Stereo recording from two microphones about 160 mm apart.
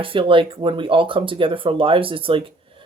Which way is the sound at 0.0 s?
35° right (ahead or behind).